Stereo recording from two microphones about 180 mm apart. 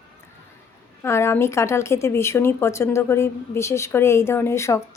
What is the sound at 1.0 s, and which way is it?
Speech, 15° left (ahead or behind).